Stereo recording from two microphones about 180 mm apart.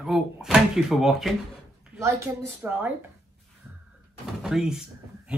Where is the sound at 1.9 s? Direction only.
15° right (ahead or behind).